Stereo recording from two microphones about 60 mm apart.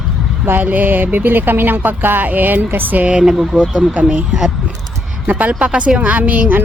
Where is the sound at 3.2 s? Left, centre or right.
Centre; by 6.6 s right.